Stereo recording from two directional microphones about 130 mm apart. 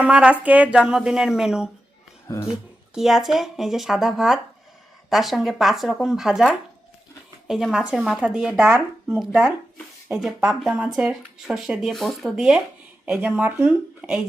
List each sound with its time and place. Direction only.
0.0 s speech: 10° right (ahead or behind)
2.2 s speech: 20° left (ahead or behind)
2.5 s speech: 5° right (ahead or behind)